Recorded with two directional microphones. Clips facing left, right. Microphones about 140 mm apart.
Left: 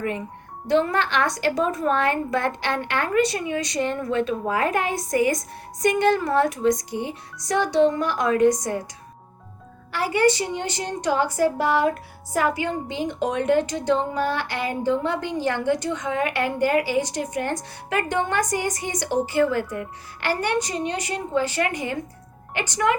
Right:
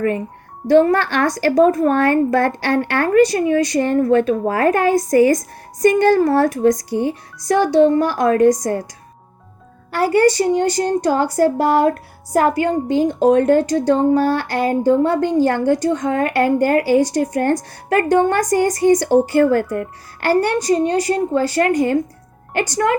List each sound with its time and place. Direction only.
0.8 s a woman's voice: 45° right (ahead or behind)
7.4 s a woman's voice: 35° right (ahead or behind)
9.9 s a woman's voice: 45° right (ahead or behind)